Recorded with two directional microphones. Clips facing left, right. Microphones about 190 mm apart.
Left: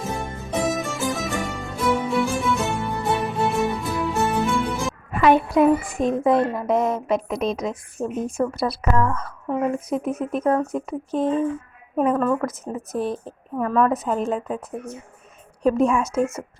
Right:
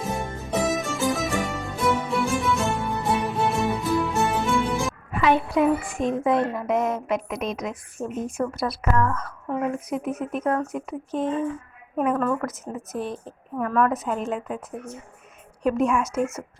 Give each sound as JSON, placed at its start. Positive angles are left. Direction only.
{"t": 0.0, "sound": "music", "side_deg": 0}
{"t": 5.1, "sound": "speech", "side_deg": 50}
{"t": 15.6, "sound": "a woman's voice", "side_deg": 30}